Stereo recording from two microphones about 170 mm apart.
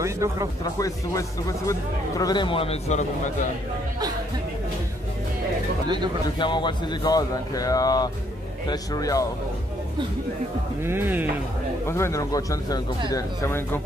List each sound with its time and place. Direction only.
0.0 s speech: 15° right (ahead or behind)
0.7 s a man's voice: 20° left (ahead or behind); by 3.1 s 40° left (ahead or behind)
6.2 s a man's voice: 25° left (ahead or behind)
10.8 s speech: 15° right (ahead or behind)
11.9 s a man's voice: 15° left (ahead or behind)